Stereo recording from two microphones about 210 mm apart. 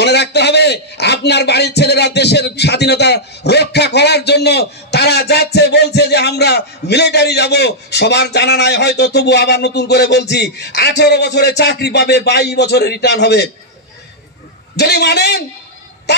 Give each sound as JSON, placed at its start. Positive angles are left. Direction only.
{"t": 0.0, "sound": "a man's voice", "side_deg": 55}
{"t": 14.8, "sound": "a man's voice", "side_deg": 50}